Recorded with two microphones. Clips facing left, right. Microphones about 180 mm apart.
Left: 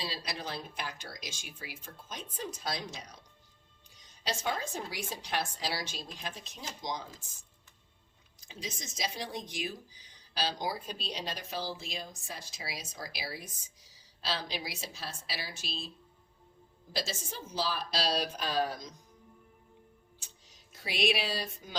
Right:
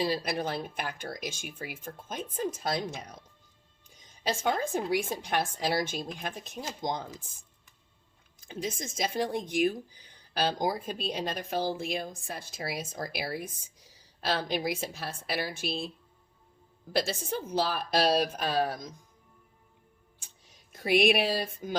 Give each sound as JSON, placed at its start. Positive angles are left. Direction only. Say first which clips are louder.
{"t": 0.0, "sound": "speech", "louder": "right 10 dB", "side_deg": -55}
{"t": 4.2, "sound": "speech", "louder": "right 6 dB", "side_deg": -55}
{"t": 8.4, "sound": "speech", "louder": "right 8 dB", "side_deg": -55}
{"t": 16.9, "sound": "a woman's voice", "louder": "right 8 dB", "side_deg": -60}
{"t": 20.7, "sound": "speech", "louder": "right 8 dB", "side_deg": -55}